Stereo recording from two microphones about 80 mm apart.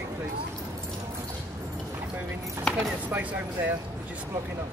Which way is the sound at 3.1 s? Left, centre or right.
Right.